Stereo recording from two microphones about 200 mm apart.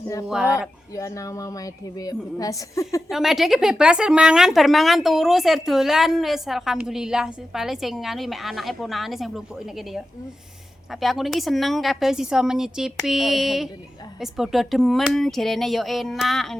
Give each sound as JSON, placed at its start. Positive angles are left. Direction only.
{"t": 0.9, "sound": "a woman's voice", "side_deg": 15}
{"t": 3.1, "sound": "speech", "side_deg": 0}
{"t": 11.0, "sound": "speech", "side_deg": 0}